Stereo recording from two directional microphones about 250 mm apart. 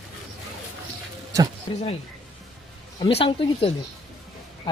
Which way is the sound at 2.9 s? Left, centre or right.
Left.